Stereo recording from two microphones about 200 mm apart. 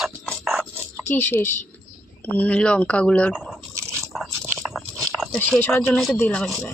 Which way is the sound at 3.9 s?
Centre (ahead or behind).